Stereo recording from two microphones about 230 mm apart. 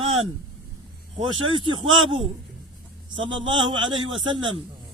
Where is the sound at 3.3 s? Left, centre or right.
Right.